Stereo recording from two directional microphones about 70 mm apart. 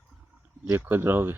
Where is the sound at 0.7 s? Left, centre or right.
Right.